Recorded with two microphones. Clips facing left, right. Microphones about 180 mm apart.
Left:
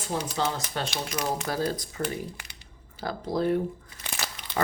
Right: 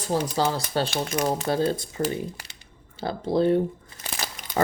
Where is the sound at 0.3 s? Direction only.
35° right (ahead or behind).